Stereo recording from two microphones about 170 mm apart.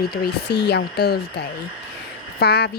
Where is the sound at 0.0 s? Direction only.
70° left (ahead or behind).